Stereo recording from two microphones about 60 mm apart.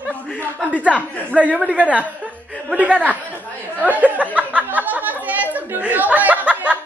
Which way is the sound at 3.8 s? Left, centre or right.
Right.